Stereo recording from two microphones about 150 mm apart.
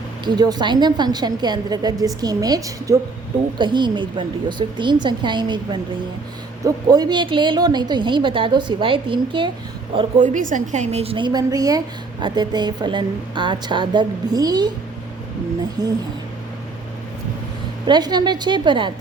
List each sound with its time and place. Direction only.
0.3 s a woman's voice: 30° right (ahead or behind)
10.2 s a woman's voice: 55° right (ahead or behind); by 14.7 s 25° right (ahead or behind)
17.8 s a woman's voice: 30° right (ahead or behind)